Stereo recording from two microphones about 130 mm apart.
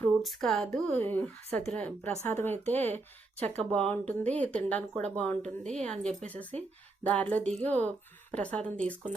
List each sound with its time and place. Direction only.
0.2 s speech: centre (ahead or behind)
0.9 s speech: 15° left (ahead or behind)